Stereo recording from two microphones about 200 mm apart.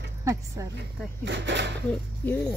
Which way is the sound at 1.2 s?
60° right (ahead or behind).